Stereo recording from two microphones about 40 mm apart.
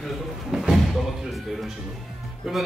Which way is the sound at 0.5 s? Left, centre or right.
Centre.